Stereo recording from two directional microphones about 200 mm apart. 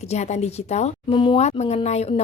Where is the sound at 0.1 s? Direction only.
35° left (ahead or behind).